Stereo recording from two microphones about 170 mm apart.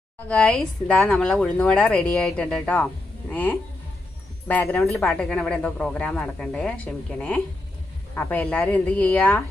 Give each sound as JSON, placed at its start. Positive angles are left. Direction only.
{"t": 0.3, "sound": "speech", "side_deg": 5}